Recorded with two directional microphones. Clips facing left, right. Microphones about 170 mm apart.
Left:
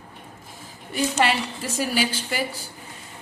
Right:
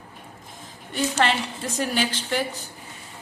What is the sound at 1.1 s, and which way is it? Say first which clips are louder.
A woman's voice: even; 10° left (ahead or behind).